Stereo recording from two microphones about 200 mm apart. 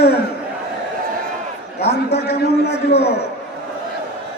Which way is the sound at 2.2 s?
55° left (ahead or behind).